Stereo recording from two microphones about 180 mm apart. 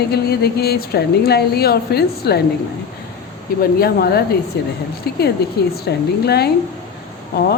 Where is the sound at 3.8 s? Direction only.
60° left (ahead or behind).